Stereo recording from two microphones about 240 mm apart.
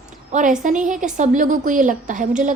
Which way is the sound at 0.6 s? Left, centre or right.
Right.